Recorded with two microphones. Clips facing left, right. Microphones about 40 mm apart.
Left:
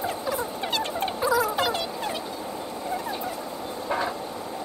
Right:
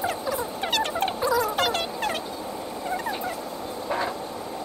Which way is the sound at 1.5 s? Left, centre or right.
Right.